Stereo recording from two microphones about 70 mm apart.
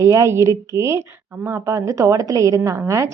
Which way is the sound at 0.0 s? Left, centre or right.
Right.